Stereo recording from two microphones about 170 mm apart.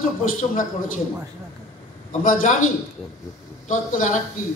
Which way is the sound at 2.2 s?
50° left (ahead or behind).